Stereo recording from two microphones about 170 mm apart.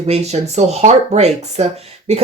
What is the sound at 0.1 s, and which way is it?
Speech, 40° right (ahead or behind).